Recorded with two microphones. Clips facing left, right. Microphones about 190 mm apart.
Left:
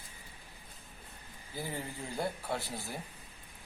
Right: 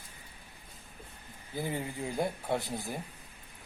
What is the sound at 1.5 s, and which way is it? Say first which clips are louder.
A man's voice: right 5 dB; 20° right (ahead or behind).